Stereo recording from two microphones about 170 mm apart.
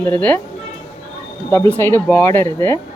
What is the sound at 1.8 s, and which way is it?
Speech, 10° left (ahead or behind).